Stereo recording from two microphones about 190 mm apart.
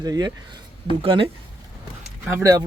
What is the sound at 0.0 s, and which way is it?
Speech, 20° right (ahead or behind).